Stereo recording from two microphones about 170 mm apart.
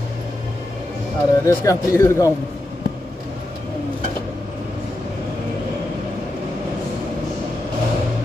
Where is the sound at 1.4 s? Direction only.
15° left (ahead or behind).